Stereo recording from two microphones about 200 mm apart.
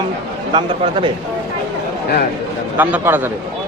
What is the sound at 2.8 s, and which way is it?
Speech, 10° right (ahead or behind).